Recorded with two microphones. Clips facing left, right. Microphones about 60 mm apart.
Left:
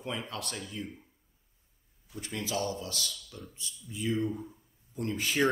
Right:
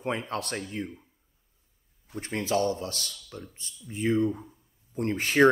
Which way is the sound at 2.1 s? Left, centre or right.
Right.